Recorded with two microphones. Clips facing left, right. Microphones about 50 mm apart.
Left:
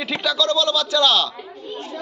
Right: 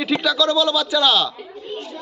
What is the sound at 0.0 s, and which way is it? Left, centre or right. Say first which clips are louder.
A man's voice: right 3 dB; centre.